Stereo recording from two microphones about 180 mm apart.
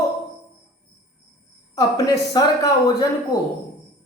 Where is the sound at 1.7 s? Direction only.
20° left (ahead or behind).